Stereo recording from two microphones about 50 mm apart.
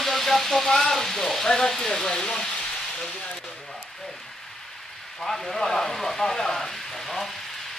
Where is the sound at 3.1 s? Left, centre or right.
Centre.